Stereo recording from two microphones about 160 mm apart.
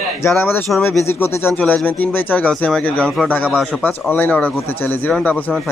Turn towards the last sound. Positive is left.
turn(degrees=10)  # may be behind; listen again after turning